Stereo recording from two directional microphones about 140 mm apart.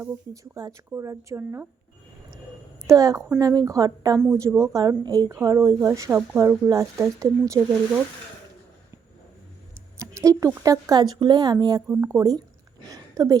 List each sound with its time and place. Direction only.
0.5 s speech: 25° right (ahead or behind)
2.8 s speech: 25° right (ahead or behind)
10.0 s speech: 20° right (ahead or behind)
11.9 s speech: 20° right (ahead or behind)
12.9 s a sound: 25° right (ahead or behind)